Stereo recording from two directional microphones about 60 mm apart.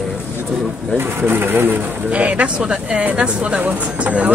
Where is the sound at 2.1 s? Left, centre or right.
Right.